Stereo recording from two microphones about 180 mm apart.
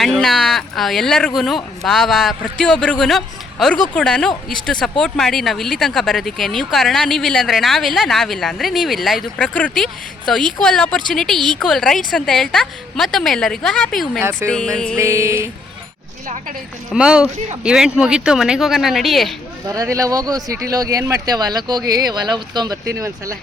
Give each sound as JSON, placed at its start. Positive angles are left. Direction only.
{"t": 0.0, "sound": "speech", "side_deg": 0}
{"t": 14.9, "sound": "music", "side_deg": -15}
{"t": 16.2, "sound": "speech", "side_deg": -40}
{"t": 16.9, "sound": "speech", "side_deg": -5}
{"t": 19.6, "sound": "speech", "side_deg": -20}
{"t": 23.0, "sound": "music", "side_deg": -15}